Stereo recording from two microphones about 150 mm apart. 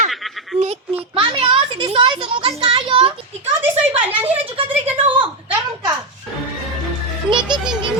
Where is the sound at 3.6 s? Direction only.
10° right (ahead or behind).